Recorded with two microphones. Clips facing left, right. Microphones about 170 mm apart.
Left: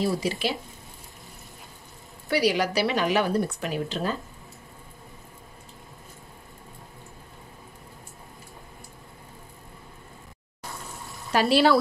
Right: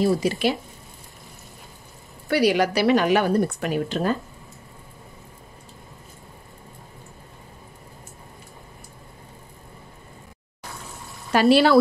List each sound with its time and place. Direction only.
0.2 s speech: 50° right (ahead or behind)
2.2 s a woman's voice: 55° right (ahead or behind)
11.3 s a woman's voice: 60° right (ahead or behind)